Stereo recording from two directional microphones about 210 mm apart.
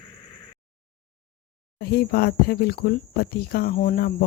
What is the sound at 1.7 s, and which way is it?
Speech, 50° left (ahead or behind).